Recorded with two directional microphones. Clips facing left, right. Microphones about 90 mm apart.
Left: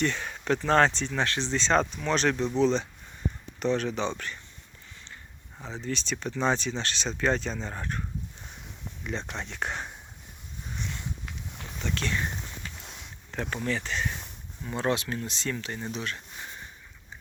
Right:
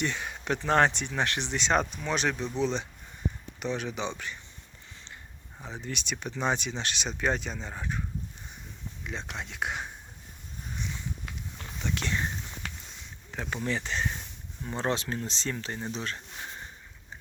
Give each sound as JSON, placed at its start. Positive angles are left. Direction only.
{"t": 0.0, "sound": "speech", "side_deg": -15}
{"t": 5.6, "sound": "speech", "side_deg": -15}
{"t": 9.0, "sound": "speech", "side_deg": 0}
{"t": 11.8, "sound": "speech", "side_deg": -15}
{"t": 12.6, "sound": "boat", "side_deg": -70}
{"t": 13.3, "sound": "speech", "side_deg": -10}
{"t": 13.7, "sound": "speech", "side_deg": -20}